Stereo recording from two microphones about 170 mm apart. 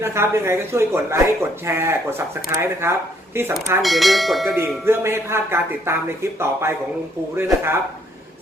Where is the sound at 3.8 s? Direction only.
Centre (ahead or behind).